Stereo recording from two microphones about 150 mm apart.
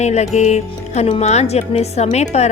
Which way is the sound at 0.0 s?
45° left (ahead or behind).